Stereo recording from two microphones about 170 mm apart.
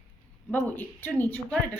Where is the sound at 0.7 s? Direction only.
10° left (ahead or behind).